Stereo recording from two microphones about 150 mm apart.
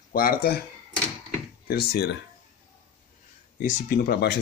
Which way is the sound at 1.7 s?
90° left.